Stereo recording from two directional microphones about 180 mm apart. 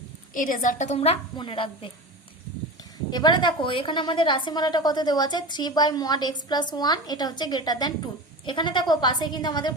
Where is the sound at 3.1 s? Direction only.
25° left (ahead or behind).